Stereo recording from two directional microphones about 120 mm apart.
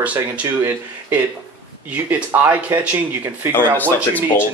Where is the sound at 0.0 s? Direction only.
10° right (ahead or behind).